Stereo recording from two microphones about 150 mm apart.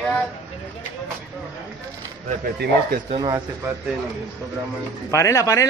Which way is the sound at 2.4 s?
90° right.